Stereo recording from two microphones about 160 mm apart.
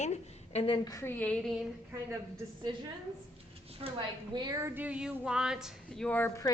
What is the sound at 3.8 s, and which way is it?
A woman's voice, 30° right (ahead or behind).